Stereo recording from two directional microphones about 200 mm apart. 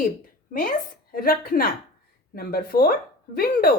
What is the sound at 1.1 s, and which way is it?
A woman's voice, 45° left (ahead or behind).